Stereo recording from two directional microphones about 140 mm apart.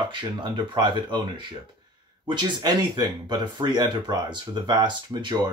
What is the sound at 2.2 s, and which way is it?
Speech, 30° right (ahead or behind).